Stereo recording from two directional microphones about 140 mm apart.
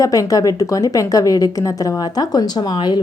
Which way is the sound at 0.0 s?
25° left (ahead or behind).